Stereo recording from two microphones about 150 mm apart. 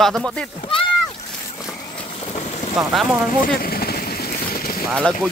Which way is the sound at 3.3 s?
80° left.